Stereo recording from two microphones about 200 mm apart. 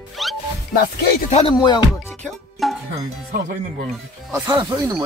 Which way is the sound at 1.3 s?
25° left (ahead or behind).